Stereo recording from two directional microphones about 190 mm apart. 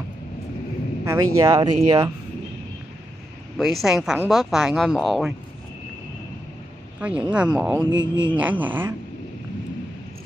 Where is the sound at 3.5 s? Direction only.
Centre (ahead or behind).